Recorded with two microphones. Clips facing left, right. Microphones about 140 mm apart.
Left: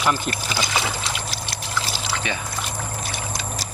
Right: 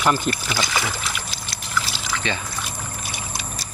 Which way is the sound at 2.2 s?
10° left (ahead or behind).